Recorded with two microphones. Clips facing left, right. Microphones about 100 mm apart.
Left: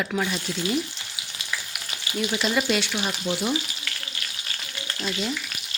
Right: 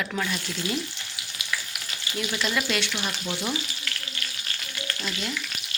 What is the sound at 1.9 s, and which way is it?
Frying, 20° left (ahead or behind).